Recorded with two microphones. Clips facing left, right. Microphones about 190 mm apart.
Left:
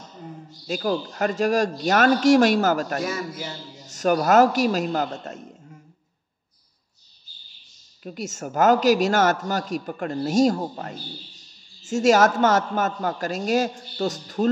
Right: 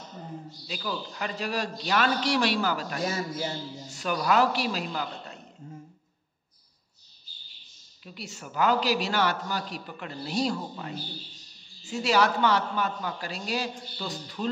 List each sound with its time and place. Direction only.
0.7 s a man's voice: 45° left (ahead or behind)
8.0 s a man's voice: 45° left (ahead or behind)